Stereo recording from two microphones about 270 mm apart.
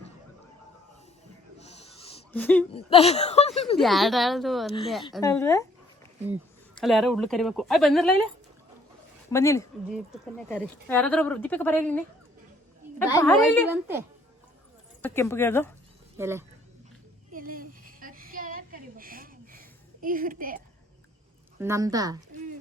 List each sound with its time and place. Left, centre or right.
1.6 s owl: left
2.3 s a woman's voice: centre
2.7 s speech: left
3.8 s a woman's voice: centre
5.2 s speech: centre
6.2 s a woman's voice: centre
9.3 s speech: centre
9.9 s a woman's voice: centre
13.1 s speech: centre
15.0 s speech: centre
16.1 s speech: centre
17.3 s a sound: right
21.6 s a woman's voice: centre